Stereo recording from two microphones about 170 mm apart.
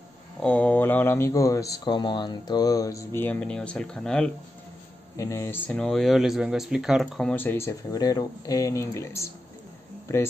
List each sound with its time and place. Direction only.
0.4 s speech: 10° left (ahead or behind)
3.2 s speech: 10° left (ahead or behind)
5.1 s speech: 20° left (ahead or behind)